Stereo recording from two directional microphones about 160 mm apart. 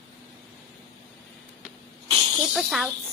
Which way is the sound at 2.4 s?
Centre (ahead or behind).